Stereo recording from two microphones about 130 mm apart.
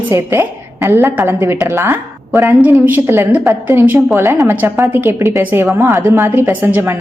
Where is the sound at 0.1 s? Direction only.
15° right (ahead or behind).